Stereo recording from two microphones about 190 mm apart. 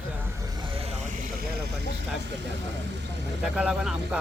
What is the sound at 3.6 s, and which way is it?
Speech, 5° right (ahead or behind).